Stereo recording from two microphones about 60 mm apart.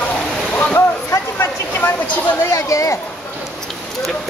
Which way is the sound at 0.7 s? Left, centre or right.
Left.